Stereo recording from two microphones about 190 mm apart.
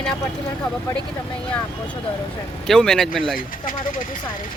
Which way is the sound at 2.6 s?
5° left (ahead or behind).